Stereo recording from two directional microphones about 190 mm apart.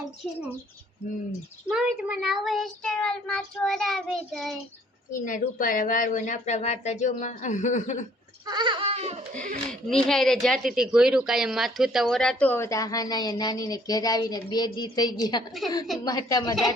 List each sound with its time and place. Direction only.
1.7 s child singing: 5° right (ahead or behind)
5.1 s a woman's voice: 45° left (ahead or behind)
8.4 s speech: 25° right (ahead or behind)
9.6 s a woman's voice: centre (ahead or behind); by 16.6 s 20° left (ahead or behind)